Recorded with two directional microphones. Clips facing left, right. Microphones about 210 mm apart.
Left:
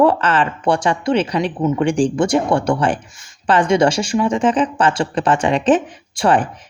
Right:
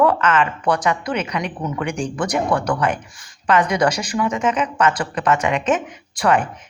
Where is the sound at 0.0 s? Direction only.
30° left (ahead or behind).